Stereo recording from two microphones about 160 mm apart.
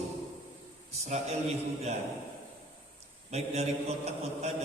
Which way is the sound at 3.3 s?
45° right (ahead or behind).